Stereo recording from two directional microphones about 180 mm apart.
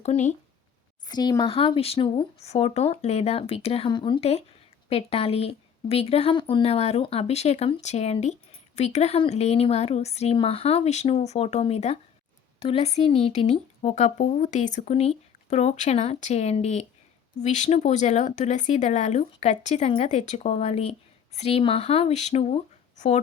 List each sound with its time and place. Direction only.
0.0 s a woman's voice: 40° left (ahead or behind)
1.0 s a woman's voice: 20° left (ahead or behind); by 23.2 s 40° left (ahead or behind)